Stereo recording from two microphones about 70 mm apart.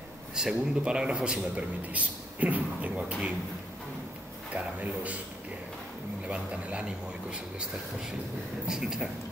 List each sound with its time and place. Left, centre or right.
0.4 s a man's voice: centre
4.6 s a man's voice: right
6.2 s a man's voice: centre
8.6 s a man's voice: centre